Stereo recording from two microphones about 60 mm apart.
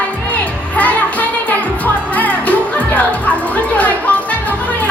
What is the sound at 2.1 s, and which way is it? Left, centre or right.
Music, left.